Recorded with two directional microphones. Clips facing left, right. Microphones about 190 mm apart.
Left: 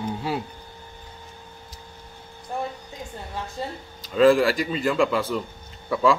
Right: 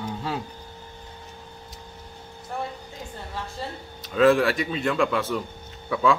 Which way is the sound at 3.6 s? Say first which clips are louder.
Left 3 dB; 15° left (ahead or behind).